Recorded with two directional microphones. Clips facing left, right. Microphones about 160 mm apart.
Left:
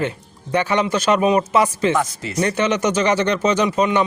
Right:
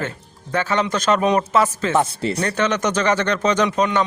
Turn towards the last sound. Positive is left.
turn(degrees=5)  # may be behind; listen again after turning